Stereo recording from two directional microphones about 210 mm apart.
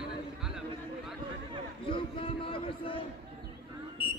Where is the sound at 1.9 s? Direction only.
25° left (ahead or behind).